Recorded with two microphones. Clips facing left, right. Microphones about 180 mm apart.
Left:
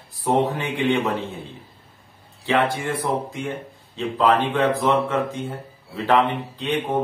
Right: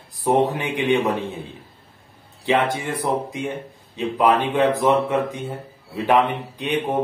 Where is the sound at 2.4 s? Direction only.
20° right (ahead or behind).